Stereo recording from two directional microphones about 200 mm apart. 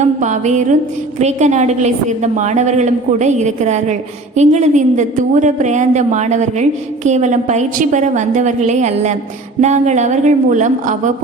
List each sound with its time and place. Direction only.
0.0 s a woman's voice: 35° right (ahead or behind)